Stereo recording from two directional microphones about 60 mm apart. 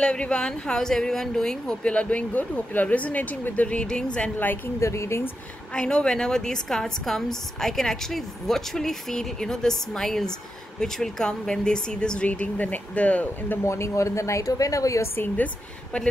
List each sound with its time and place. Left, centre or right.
0.0 s a woman's voice: centre
1.8 s speech: centre
4.7 s speech: left
5.8 s a woman's voice: centre
12.3 s speech: left
13.7 s speech: left
15.1 s speech: left